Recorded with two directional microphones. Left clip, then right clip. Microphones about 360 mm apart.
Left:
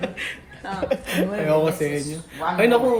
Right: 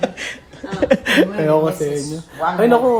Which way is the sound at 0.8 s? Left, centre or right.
Right.